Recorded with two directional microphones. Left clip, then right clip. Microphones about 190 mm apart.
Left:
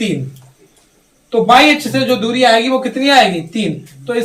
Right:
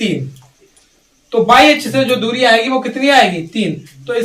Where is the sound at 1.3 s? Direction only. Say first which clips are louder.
Even; 20° right (ahead or behind).